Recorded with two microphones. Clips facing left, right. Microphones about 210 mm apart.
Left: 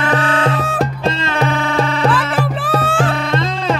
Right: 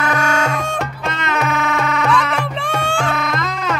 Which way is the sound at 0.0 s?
30° left (ahead or behind).